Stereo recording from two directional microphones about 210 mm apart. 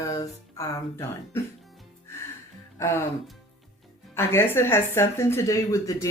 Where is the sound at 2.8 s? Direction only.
10° left (ahead or behind).